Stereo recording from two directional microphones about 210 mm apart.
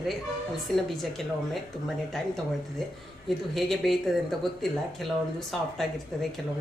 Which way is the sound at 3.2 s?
Centre (ahead or behind).